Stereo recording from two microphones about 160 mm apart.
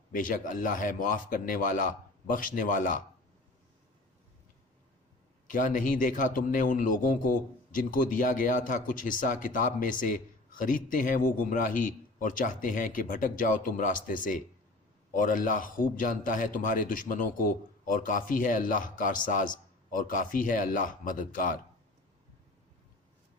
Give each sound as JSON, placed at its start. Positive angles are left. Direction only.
{"t": 0.1, "sound": "a man's voice", "side_deg": 55}
{"t": 5.5, "sound": "a man's voice", "side_deg": 55}